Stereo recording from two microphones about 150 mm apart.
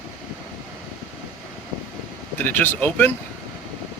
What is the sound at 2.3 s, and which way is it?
Speech, 15° left (ahead or behind).